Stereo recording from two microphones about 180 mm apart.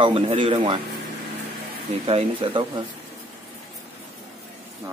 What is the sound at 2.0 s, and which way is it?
Speech, 30° right (ahead or behind).